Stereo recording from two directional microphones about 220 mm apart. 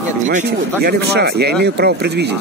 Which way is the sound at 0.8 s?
45° right (ahead or behind).